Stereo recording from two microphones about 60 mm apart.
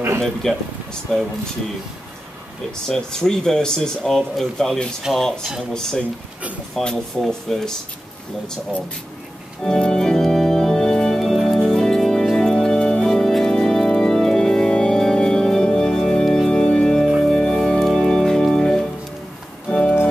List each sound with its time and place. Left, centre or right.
0.2 s speech: centre
2.9 s speech: centre
5.1 s speech: centre
5.7 s speech: centre
9.6 s organ: centre
19.7 s music: centre